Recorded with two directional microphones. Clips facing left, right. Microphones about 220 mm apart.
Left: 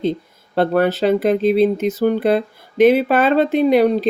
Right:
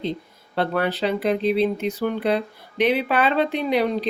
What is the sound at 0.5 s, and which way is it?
Speech, 45° left (ahead or behind).